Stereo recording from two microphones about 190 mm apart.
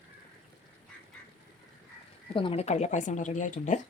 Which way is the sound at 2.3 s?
25° left (ahead or behind).